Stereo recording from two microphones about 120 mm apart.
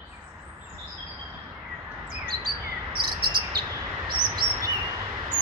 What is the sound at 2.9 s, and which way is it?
Cricket, 40° right (ahead or behind).